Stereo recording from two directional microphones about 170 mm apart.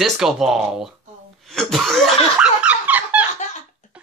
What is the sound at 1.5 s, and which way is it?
Laughter, centre (ahead or behind).